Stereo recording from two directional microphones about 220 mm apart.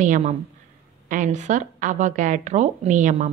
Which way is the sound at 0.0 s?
35° right (ahead or behind).